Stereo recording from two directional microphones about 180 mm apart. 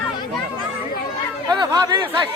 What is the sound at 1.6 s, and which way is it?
Speech, 20° right (ahead or behind).